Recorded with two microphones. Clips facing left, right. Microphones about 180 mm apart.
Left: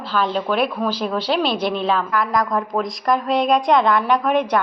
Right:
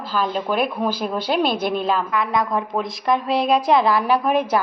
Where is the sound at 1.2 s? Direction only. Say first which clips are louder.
Right 1 dB; 50° right (ahead or behind).